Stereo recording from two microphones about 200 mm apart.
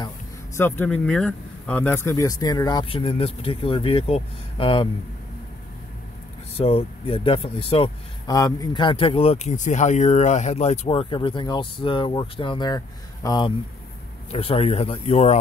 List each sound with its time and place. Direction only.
0.6 s speech: 10° left (ahead or behind); by 4.8 s 25° left (ahead or behind)
6.5 s speech: 30° left (ahead or behind)